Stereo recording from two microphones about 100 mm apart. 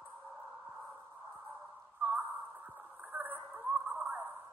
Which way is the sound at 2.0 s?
15° right (ahead or behind).